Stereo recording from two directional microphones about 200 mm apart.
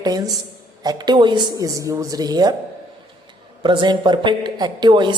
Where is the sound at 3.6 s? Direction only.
25° right (ahead or behind).